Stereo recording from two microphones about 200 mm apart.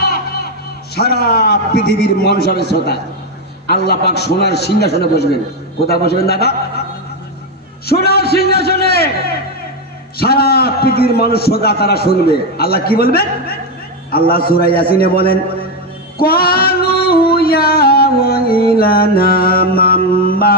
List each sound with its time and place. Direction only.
0.0 s music: 55° left (ahead or behind)
0.9 s a man's voice: 50° left (ahead or behind)
7.9 s a man's voice: 50° left (ahead or behind)
16.1 s female singing: 50° left (ahead or behind)